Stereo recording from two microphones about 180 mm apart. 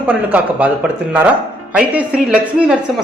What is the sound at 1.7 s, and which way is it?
A man's voice, 5° right (ahead or behind).